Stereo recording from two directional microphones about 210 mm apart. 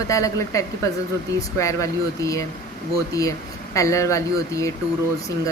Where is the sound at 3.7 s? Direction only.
15° left (ahead or behind).